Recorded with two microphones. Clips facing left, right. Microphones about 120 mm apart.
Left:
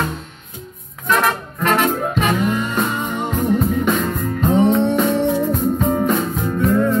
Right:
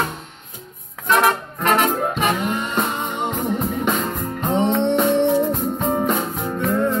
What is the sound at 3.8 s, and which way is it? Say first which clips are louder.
Music: left 3 dB; 25° right (ahead or behind).